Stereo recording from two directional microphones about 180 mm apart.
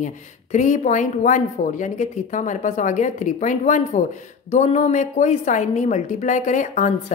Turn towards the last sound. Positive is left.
turn(degrees=45)  # may be behind; listen again after turning